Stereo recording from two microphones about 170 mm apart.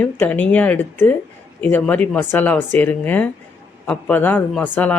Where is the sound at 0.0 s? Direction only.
10° left (ahead or behind).